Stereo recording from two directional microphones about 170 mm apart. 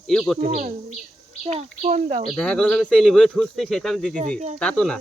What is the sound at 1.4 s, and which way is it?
Speech, 35° right (ahead or behind).